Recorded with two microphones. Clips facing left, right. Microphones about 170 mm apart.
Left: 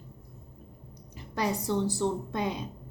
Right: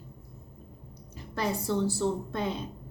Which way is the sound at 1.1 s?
15° left (ahead or behind).